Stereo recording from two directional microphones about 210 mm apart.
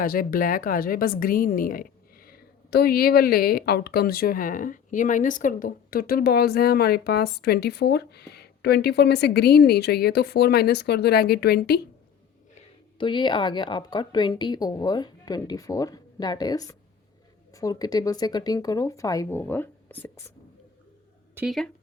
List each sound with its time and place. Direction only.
0.0 s speech: 40° left (ahead or behind)
12.5 s a woman's voice: 25° left (ahead or behind)
21.3 s speech: centre (ahead or behind)